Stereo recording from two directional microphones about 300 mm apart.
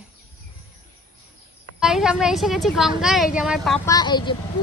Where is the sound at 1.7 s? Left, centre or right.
Centre.